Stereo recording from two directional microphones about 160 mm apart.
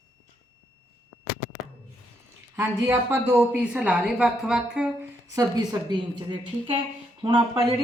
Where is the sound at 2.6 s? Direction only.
15° right (ahead or behind).